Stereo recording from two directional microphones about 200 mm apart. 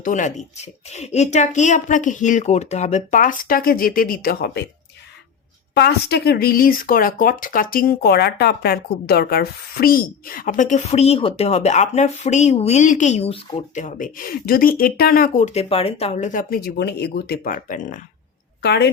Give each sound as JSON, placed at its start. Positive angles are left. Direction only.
{"t": 0.0, "sound": "a woman's voice", "side_deg": 40}
{"t": 5.7, "sound": "speech", "side_deg": 55}
{"t": 18.6, "sound": "a woman's voice", "side_deg": 55}